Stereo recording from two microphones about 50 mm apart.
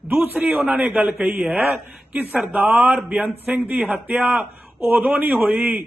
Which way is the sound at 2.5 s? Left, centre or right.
Right.